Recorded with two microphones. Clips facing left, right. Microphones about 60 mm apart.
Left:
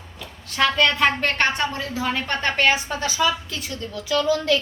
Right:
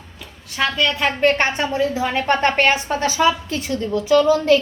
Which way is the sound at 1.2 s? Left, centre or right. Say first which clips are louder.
Right 4 dB; centre.